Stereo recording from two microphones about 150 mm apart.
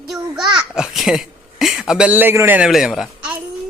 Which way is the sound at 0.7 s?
5° right (ahead or behind).